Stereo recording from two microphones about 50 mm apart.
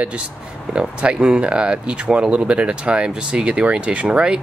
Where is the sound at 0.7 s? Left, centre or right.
Centre.